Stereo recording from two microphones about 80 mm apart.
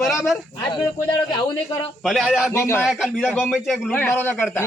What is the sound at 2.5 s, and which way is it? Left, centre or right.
Speech, left.